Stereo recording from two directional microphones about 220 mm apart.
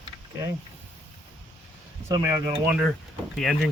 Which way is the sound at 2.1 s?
15° right (ahead or behind).